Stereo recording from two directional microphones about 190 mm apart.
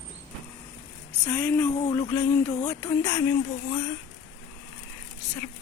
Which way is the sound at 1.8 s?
25° left (ahead or behind).